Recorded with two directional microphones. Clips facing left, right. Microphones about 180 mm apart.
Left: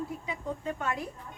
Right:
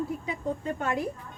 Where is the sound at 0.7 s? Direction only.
35° right (ahead or behind).